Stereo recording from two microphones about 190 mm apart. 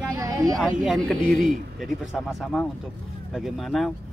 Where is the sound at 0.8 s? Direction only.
Centre (ahead or behind).